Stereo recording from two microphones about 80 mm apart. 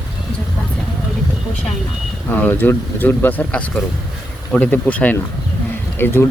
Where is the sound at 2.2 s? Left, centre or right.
Left.